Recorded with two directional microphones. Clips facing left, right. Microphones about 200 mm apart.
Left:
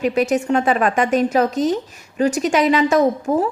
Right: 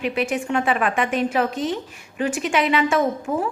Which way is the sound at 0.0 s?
40° left (ahead or behind).